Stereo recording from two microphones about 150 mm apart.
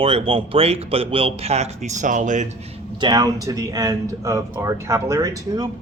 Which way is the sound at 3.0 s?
30° right (ahead or behind).